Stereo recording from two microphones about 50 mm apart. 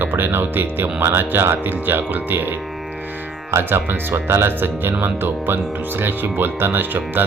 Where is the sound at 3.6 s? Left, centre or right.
Right.